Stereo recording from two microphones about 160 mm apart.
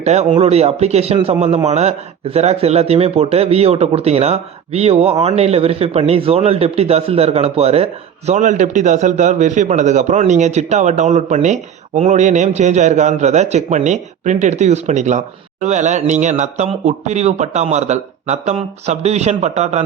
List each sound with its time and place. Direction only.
0.0 s a man's voice: 40° right (ahead or behind)
8.3 s a man's voice: 50° right (ahead or behind)